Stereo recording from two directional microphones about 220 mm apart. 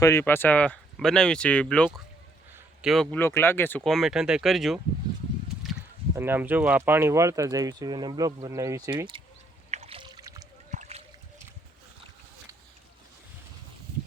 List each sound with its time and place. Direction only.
0.0 s speech: 10° left (ahead or behind)
6.1 s speech: 10° right (ahead or behind)
9.7 s a sound: 25° right (ahead or behind)
10.7 s splash: 30° right (ahead or behind)